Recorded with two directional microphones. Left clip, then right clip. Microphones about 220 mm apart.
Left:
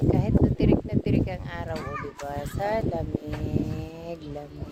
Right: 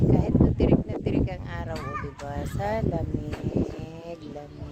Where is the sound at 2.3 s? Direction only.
5° left (ahead or behind).